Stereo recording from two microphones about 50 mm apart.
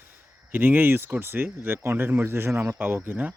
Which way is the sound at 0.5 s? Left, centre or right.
Right.